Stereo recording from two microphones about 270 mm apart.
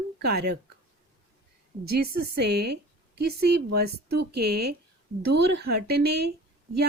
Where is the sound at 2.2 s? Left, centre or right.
Right.